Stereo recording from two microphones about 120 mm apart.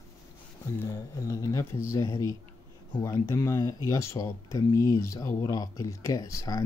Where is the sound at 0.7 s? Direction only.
25° left (ahead or behind).